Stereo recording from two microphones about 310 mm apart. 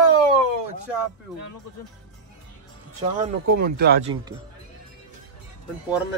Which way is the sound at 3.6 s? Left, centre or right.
Right.